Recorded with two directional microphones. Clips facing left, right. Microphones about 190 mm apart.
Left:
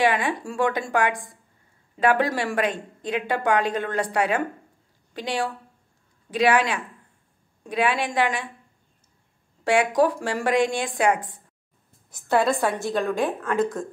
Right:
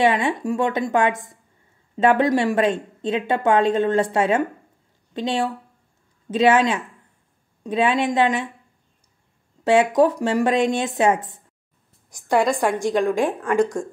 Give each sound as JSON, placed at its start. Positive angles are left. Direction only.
{"t": 0.0, "sound": "a woman's voice", "side_deg": -25}
{"t": 9.7, "sound": "a woman's voice", "side_deg": -20}
{"t": 12.1, "sound": "a woman's voice", "side_deg": -15}